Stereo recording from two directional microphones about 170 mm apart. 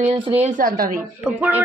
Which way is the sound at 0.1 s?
35° right (ahead or behind).